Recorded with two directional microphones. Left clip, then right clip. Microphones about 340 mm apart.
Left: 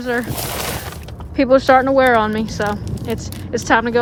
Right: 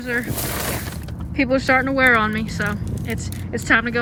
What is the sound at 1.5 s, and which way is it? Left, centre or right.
Speech, centre.